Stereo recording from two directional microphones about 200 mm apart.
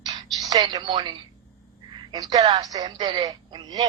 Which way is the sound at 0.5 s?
20° right (ahead or behind).